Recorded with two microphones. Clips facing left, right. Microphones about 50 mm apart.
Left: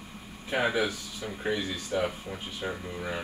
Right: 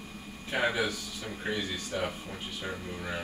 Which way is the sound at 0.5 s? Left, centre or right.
Centre.